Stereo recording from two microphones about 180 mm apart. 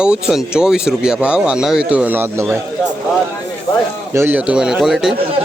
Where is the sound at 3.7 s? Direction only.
20° left (ahead or behind).